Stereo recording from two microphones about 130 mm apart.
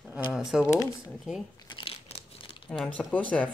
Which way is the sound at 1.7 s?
45° left (ahead or behind).